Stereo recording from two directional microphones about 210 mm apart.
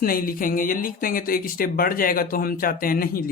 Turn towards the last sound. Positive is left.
turn(degrees=45)  # may be behind; listen again after turning